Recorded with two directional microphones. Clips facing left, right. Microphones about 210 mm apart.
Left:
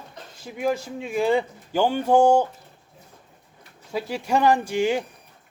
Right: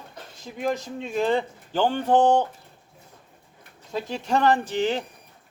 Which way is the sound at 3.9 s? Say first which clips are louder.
Left 1 dB; 10° left (ahead or behind).